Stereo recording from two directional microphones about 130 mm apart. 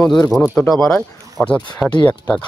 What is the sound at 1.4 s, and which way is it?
Speech, 20° left (ahead or behind).